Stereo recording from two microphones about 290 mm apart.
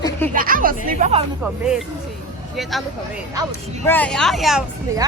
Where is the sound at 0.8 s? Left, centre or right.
Right.